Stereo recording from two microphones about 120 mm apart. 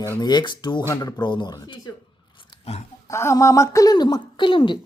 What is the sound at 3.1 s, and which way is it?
Speech, 25° left (ahead or behind).